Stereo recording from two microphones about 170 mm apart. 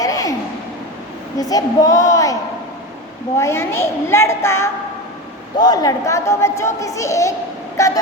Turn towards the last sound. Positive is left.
turn(degrees=20)  # may be behind; listen again after turning